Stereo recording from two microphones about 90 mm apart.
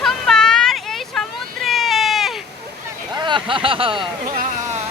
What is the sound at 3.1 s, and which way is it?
Speech, 55° right (ahead or behind).